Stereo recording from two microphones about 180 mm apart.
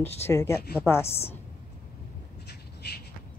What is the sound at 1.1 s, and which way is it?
Speech, 35° left (ahead or behind).